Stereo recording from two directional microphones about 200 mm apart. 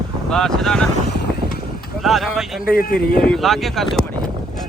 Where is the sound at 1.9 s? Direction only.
Centre (ahead or behind).